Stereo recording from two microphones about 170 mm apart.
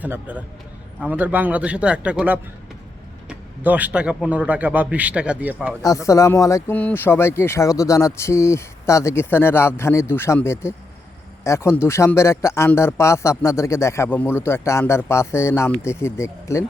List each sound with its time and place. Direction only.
0.0 s speech: 10° right (ahead or behind)
5.8 s speech: 20° left (ahead or behind)